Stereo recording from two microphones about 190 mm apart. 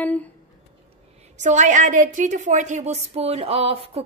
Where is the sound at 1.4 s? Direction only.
40° right (ahead or behind).